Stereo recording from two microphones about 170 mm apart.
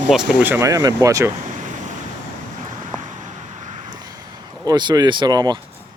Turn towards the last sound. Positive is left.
turn(degrees=-25)  # may be behind; listen again after turning